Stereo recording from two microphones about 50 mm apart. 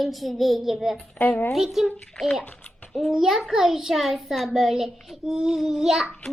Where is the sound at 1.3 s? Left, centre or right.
Left.